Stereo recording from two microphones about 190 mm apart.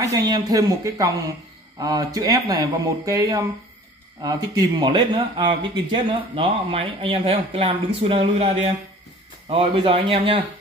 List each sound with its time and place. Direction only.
0.0 s speech: 20° right (ahead or behind)